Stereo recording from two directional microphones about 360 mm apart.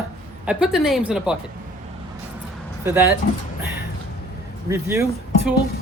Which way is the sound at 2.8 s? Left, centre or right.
Centre.